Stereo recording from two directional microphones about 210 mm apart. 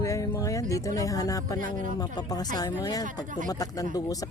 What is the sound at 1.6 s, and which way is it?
Speech, 40° right (ahead or behind).